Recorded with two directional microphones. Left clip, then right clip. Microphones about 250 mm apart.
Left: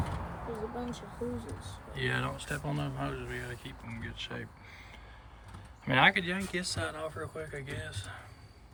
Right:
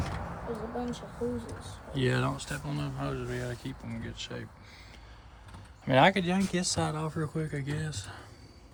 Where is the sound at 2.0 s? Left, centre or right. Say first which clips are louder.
Right 3 dB; centre.